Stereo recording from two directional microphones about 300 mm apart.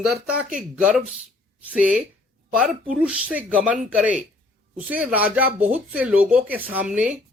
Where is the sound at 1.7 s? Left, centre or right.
Centre.